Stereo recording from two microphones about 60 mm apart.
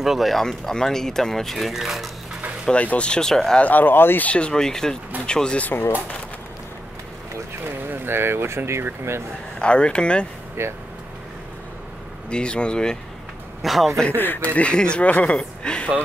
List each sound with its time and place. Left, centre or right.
0.0 s speech: centre
2.6 s speech: centre
3.6 s speech: left
4.3 s speech: centre
5.7 s speech: left
7.9 s speech: right
9.6 s speech: centre
10.6 s speech: right
12.3 s speech: centre
13.6 s a man's voice: centre
14.1 s speech: left; by 15.9 s centre